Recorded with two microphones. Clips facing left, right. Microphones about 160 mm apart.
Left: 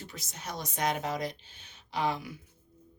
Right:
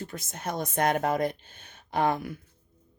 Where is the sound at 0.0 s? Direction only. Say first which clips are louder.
Right 8 dB; 50° right (ahead or behind).